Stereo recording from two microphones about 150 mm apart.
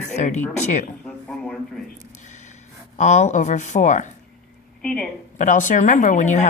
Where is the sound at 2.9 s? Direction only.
50° left (ahead or behind).